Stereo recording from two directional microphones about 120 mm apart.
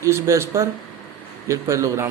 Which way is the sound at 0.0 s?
25° right (ahead or behind).